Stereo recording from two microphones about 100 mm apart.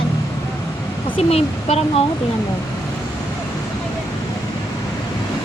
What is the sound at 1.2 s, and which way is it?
Speech, 90° left.